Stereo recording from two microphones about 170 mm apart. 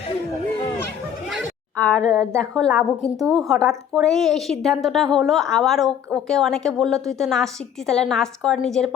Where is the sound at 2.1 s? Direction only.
15° right (ahead or behind).